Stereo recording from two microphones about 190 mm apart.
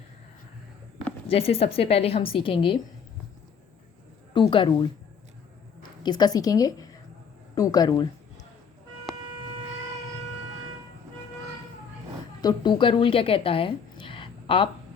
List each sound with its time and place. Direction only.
1.3 s a woman's voice: 30° left (ahead or behind)
4.4 s a woman's voice: 25° left (ahead or behind)
12.4 s a woman's voice: 20° left (ahead or behind)